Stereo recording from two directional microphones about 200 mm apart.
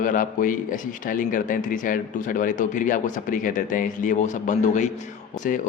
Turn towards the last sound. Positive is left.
turn(degrees=40)  # may be behind; listen again after turning